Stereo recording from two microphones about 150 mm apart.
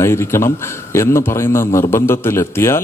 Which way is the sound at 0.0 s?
15° left (ahead or behind).